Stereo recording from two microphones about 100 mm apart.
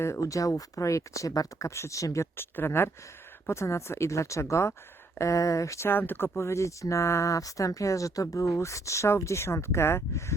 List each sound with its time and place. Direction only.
0.0 s speech: 30° left (ahead or behind)